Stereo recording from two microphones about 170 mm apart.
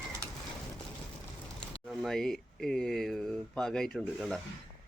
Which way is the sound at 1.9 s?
Centre (ahead or behind).